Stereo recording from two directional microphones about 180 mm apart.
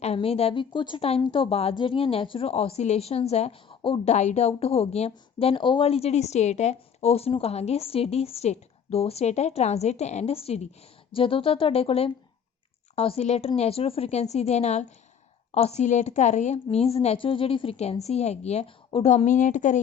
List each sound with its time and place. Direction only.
0.0 s a woman's voice: 35° left (ahead or behind)